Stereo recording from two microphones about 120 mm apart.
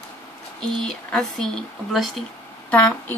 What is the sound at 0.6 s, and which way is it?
Speech, 5° left (ahead or behind).